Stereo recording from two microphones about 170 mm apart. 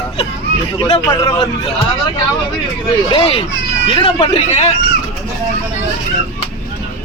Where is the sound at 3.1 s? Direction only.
30° left (ahead or behind).